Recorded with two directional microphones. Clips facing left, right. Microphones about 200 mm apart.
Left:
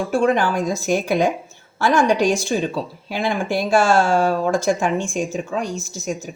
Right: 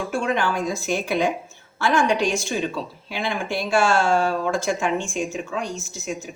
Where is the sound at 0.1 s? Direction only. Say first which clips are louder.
Left 6 dB; 40° left (ahead or behind).